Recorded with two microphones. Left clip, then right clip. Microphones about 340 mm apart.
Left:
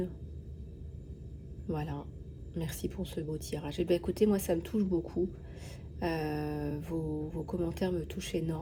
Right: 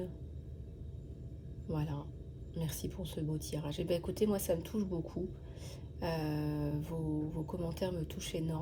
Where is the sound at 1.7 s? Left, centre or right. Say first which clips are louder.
Left 3 dB; centre.